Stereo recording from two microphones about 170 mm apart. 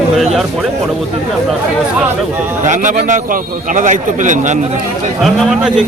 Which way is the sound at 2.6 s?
45° right (ahead or behind).